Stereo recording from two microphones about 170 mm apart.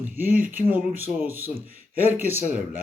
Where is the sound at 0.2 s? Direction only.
55° right (ahead or behind).